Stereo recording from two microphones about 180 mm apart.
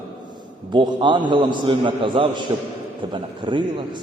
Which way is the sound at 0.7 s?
25° right (ahead or behind).